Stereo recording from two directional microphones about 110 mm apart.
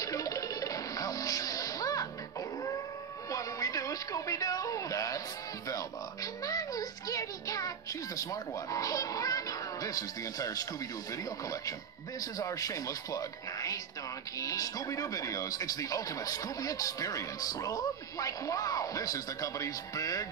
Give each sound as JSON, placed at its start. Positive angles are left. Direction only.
{"t": 0.0, "sound": "music", "side_deg": 30}
{"t": 3.3, "sound": "music", "side_deg": 30}
{"t": 12.2, "sound": "speech", "side_deg": 30}